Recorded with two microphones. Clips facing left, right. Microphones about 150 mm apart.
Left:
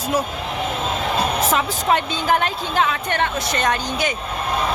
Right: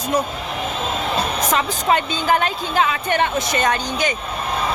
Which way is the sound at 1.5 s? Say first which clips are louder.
Right 4 dB; centre (ahead or behind).